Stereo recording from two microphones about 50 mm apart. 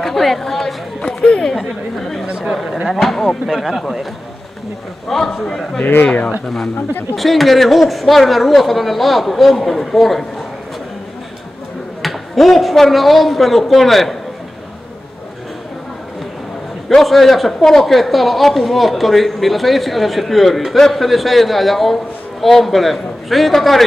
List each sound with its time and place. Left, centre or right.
0.0 s chatter: centre
1.0 s chatter: left
1.5 s chatter: centre
2.3 s a sound: centre
2.9 s a man's voice: centre
5.4 s a man's voice: centre
5.8 s speech: left
6.4 s a man's voice: centre
12.0 s a man's voice: centre
16.9 s a man's voice: centre